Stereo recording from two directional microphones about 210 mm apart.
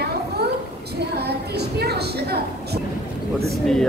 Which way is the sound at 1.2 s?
50° right (ahead or behind).